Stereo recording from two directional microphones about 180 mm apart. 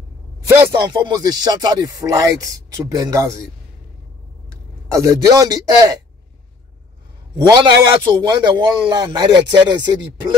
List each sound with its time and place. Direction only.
0.8 s a man's voice: 25° right (ahead or behind)
4.8 s a man's voice: 15° right (ahead or behind)
7.3 s a man's voice: 20° right (ahead or behind)